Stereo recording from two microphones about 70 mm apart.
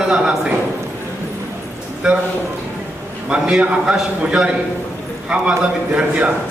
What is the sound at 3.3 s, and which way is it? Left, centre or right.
A man's voice, centre.